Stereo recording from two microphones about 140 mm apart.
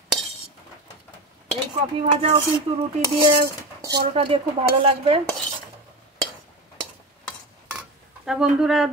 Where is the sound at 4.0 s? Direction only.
45° right (ahead or behind).